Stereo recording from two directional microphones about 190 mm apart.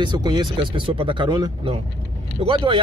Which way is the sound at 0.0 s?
20° right (ahead or behind).